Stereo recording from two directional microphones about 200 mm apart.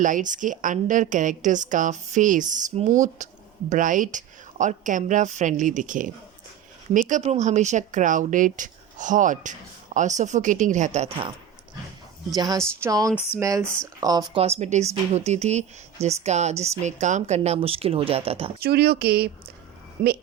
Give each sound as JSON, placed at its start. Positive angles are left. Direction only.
{"t": 0.0, "sound": "speech", "side_deg": -40}
{"t": 12.3, "sound": "a woman's voice", "side_deg": -20}
{"t": 14.3, "sound": "speech", "side_deg": -30}
{"t": 18.6, "sound": "speech", "side_deg": -55}